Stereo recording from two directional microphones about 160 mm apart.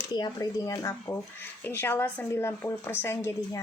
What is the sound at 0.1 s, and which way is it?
Speech, 20° left (ahead or behind).